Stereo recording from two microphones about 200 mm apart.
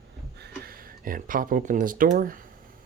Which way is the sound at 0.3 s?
55° right (ahead or behind).